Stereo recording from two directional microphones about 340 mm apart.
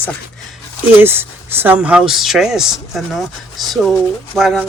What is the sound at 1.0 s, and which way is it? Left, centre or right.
Speech, centre.